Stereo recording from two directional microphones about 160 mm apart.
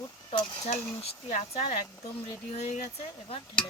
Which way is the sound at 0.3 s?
40° left (ahead or behind).